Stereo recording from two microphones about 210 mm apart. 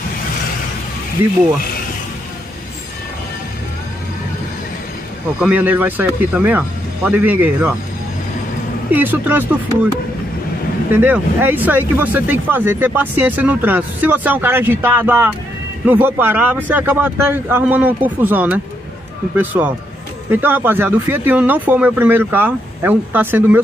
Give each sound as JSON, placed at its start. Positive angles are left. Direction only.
{"t": 5.4, "sound": "speech", "side_deg": -10}
{"t": 8.9, "sound": "speech", "side_deg": -10}
{"t": 10.9, "sound": "speech", "side_deg": -10}